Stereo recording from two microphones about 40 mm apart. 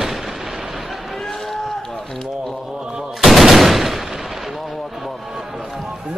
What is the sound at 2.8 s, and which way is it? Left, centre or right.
Gunshot, centre.